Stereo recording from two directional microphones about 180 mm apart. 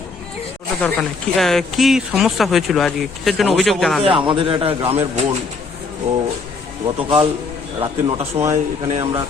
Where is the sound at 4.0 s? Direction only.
30° right (ahead or behind).